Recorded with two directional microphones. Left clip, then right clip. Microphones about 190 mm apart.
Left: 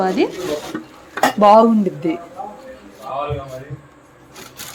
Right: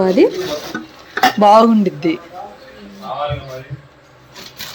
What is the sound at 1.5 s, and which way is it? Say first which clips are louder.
Speech: right 1 dB; centre (ahead or behind).